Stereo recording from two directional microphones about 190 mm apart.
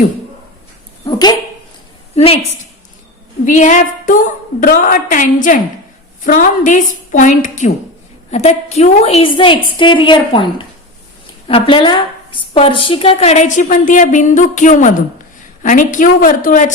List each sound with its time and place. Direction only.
1.0 s dog: 20° left (ahead or behind)
2.1 s a woman's voice: 30° left (ahead or behind)
3.4 s a woman's voice: 40° left (ahead or behind)